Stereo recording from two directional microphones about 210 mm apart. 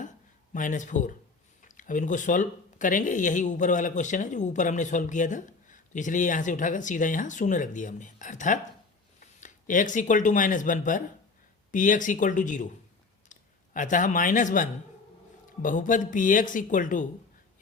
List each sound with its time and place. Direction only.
0.5 s speech: 40° left (ahead or behind)
13.7 s speech: 40° left (ahead or behind)